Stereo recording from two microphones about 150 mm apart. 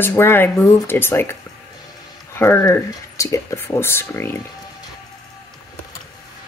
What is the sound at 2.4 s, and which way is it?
A woman's voice, 20° left (ahead or behind).